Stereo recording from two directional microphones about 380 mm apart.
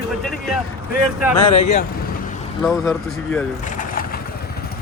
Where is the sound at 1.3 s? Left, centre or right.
Left.